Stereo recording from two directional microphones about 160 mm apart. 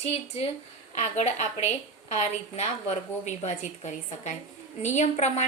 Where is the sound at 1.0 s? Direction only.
45° left (ahead or behind).